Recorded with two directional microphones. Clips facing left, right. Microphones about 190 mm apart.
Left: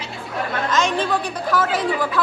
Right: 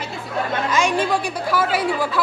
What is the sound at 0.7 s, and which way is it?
Speech, 10° right (ahead or behind).